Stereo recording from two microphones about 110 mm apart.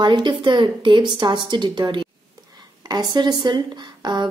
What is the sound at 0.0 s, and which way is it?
A woman's voice, 45° right (ahead or behind).